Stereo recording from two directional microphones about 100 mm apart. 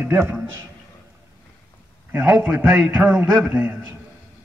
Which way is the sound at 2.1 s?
20° right (ahead or behind).